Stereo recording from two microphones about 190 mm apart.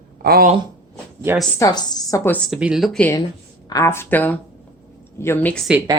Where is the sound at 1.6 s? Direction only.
20° left (ahead or behind).